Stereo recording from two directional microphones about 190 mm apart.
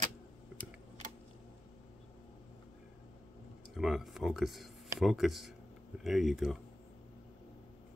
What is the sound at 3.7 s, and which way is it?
Speech, centre (ahead or behind).